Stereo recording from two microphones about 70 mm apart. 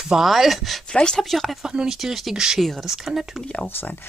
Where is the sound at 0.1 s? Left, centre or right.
Centre.